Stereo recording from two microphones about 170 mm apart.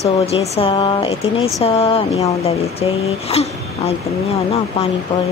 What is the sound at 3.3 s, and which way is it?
Speech, 35° left (ahead or behind).